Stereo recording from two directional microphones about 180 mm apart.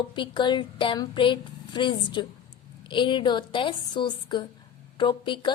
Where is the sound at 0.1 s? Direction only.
25° left (ahead or behind).